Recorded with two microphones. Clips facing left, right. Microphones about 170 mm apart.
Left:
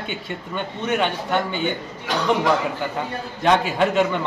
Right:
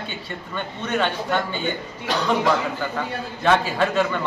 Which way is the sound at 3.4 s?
15° left (ahead or behind).